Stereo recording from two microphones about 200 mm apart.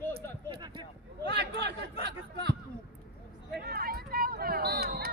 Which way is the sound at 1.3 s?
55° right (ahead or behind).